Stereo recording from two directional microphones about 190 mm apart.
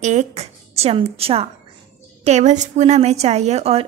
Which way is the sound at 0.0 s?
35° right (ahead or behind).